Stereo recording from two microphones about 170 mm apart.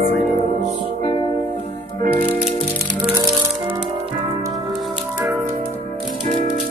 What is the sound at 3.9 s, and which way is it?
Music, 20° right (ahead or behind).